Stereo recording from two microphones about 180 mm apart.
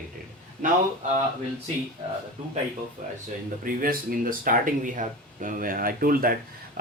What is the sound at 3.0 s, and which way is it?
Speech, 40° right (ahead or behind).